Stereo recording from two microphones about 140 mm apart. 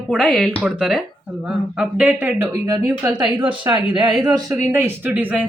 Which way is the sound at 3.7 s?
35° right (ahead or behind).